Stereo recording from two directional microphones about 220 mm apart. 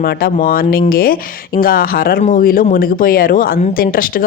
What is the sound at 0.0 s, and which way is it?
Speech, 45° left (ahead or behind).